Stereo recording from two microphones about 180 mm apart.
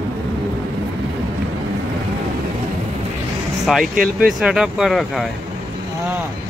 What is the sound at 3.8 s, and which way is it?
Speech, 50° right (ahead or behind).